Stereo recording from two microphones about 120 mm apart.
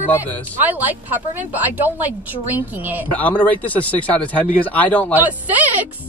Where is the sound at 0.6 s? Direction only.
15° right (ahead or behind).